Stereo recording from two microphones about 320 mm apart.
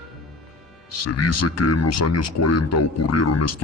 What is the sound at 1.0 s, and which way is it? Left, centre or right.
Speech, left.